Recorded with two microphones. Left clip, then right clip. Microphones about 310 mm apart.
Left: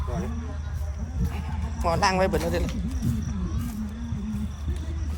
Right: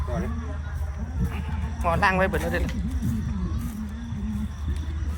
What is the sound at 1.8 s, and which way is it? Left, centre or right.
Speech, centre.